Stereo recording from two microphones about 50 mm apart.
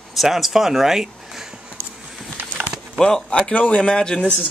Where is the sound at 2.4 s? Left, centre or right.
Right.